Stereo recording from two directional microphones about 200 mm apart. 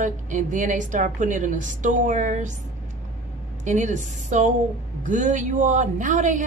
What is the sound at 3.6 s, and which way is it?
Speech, 35° right (ahead or behind).